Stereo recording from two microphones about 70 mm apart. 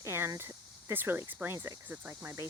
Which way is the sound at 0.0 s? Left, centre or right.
Right.